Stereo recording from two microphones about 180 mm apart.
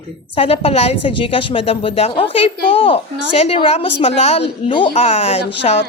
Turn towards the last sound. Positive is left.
turn(degrees=35)  # may be behind; listen again after turning